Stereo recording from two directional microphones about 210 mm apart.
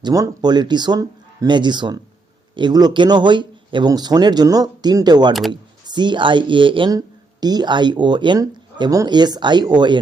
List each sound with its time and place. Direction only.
0.0 s speech: 15° right (ahead or behind)